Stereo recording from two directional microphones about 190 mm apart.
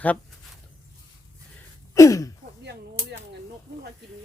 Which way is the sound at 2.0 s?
15° left (ahead or behind).